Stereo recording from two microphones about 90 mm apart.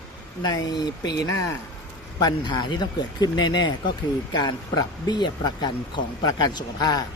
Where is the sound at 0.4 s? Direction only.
50° left (ahead or behind).